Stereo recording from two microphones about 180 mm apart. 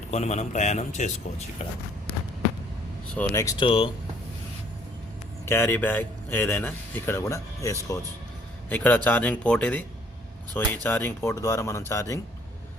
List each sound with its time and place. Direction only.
0.1 s speech: 40° left (ahead or behind)
3.2 s speech: 15° left (ahead or behind)
3.6 s speech: 30° left (ahead or behind)
5.5 s speech: 15° left (ahead or behind)